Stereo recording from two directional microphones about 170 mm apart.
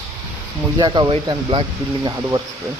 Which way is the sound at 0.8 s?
25° right (ahead or behind).